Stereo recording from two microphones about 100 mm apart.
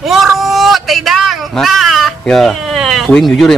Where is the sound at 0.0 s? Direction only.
Centre (ahead or behind).